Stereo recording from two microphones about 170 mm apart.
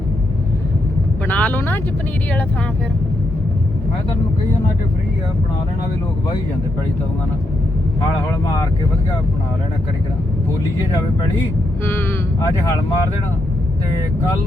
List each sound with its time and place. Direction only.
1.3 s speech: 10° left (ahead or behind)